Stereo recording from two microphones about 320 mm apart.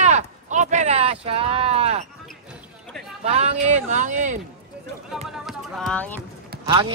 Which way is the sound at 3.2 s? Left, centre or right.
Centre.